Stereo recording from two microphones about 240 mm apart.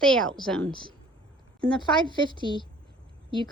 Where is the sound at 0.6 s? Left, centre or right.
Centre.